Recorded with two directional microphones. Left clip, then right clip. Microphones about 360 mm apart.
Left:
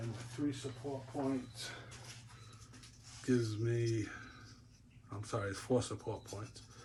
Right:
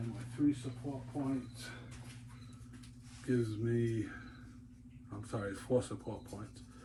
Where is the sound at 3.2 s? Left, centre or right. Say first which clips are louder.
Even; left.